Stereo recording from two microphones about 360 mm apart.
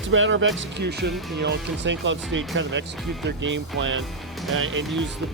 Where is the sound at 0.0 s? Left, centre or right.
Right.